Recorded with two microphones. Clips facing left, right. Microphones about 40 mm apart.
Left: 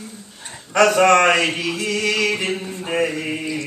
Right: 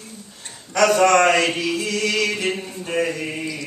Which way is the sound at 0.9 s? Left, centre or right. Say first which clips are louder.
Even; left.